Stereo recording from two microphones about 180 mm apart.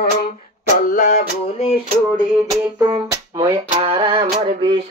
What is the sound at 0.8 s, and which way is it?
Music, 50° left (ahead or behind).